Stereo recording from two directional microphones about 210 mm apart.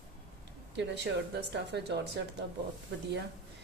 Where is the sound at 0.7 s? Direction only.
55° right (ahead or behind).